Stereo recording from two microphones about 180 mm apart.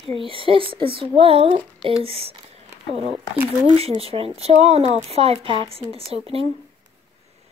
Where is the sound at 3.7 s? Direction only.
35° right (ahead or behind).